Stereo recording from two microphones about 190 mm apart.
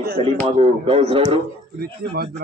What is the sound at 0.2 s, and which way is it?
A man's voice, 30° right (ahead or behind).